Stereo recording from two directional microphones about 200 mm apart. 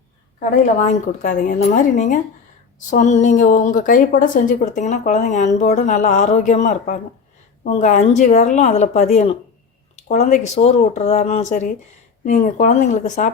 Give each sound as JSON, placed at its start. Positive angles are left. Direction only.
{"t": 0.3, "sound": "a woman's voice", "side_deg": 35}